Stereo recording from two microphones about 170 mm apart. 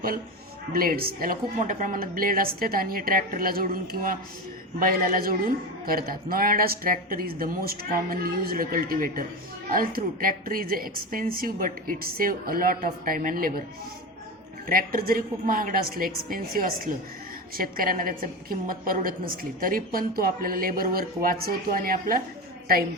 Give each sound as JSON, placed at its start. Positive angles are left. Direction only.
{"t": 0.7, "sound": "a woman's voice", "side_deg": -60}
{"t": 14.7, "sound": "a woman's voice", "side_deg": -60}